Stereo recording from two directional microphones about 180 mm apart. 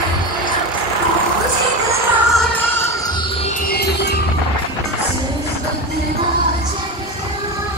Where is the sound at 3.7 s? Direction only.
65° left (ahead or behind).